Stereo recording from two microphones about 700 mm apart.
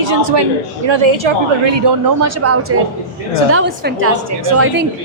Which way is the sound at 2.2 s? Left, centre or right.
Right.